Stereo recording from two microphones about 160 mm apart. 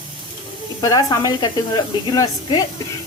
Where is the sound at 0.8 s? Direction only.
25° left (ahead or behind).